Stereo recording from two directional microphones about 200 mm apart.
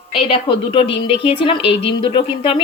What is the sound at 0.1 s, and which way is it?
Speech, 25° left (ahead or behind).